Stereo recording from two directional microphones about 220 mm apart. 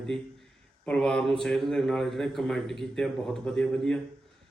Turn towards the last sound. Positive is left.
turn(degrees=5)  # may be behind; listen again after turning